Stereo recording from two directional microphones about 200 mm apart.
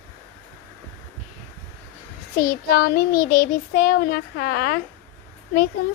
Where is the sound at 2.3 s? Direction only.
50° left (ahead or behind).